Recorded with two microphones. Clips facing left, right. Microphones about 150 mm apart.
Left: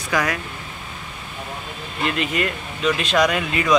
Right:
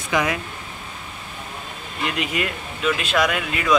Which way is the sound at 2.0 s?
15° right (ahead or behind).